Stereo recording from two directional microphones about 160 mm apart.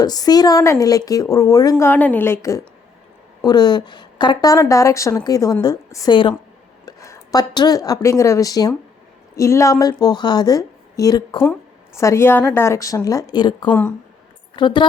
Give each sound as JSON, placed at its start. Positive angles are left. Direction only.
{"t": 0.0, "sound": "a woman's voice", "side_deg": 25}
{"t": 13.7, "sound": "a woman's voice", "side_deg": 10}
{"t": 14.5, "sound": "a woman's voice", "side_deg": 30}